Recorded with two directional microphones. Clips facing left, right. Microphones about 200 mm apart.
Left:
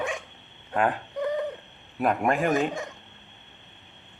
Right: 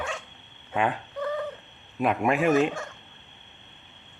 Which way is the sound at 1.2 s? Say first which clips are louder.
Left 2 dB; 20° left (ahead or behind).